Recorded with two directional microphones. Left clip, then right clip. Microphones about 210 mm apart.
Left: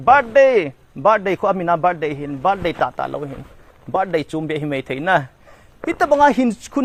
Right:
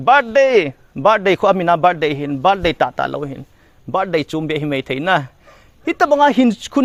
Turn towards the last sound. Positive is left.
turn(degrees=-35)  # may be behind; listen again after turning